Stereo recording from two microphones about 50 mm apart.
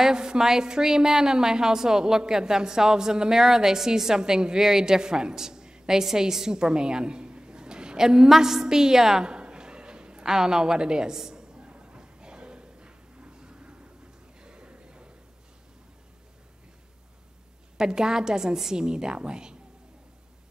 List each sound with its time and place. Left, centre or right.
0.0 s a woman's voice: centre
14.4 s a sound: centre
17.7 s a woman's voice: centre